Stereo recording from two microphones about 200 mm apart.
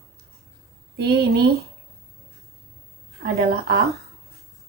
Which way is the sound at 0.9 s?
55° right (ahead or behind).